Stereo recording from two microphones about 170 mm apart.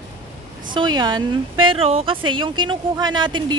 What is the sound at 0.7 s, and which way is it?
A woman's voice, 25° right (ahead or behind).